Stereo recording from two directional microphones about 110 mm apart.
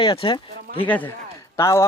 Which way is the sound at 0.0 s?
50° left (ahead or behind).